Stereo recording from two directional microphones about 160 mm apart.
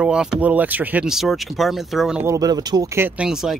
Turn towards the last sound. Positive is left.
turn(degrees=-5)  # may be behind; listen again after turning